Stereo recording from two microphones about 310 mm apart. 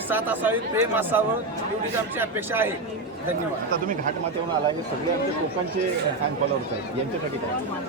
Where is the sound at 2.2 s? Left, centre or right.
Centre.